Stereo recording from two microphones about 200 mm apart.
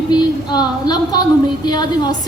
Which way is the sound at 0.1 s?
20° left (ahead or behind).